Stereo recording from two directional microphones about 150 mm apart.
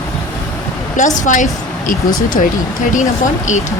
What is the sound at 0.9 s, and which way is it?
Speech, 55° left (ahead or behind).